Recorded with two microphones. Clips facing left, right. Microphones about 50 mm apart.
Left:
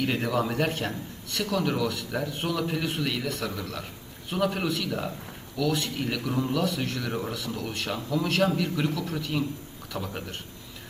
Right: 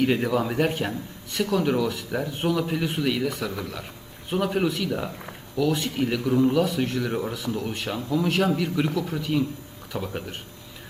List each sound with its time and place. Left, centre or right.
0.0 s a man's voice: centre
5.5 s a man's voice: right
8.4 s a man's voice: centre